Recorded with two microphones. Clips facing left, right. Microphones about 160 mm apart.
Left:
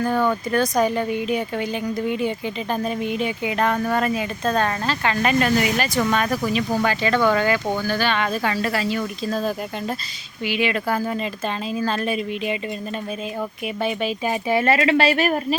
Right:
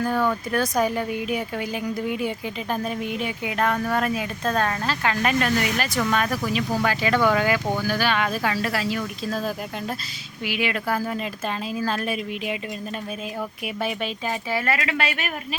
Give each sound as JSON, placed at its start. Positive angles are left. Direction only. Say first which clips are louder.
{"t": 0.0, "sound": "speech", "louder": "left 2 dB", "side_deg": 0}
{"t": 14.5, "sound": "speech", "louder": "left 9 dB", "side_deg": 25}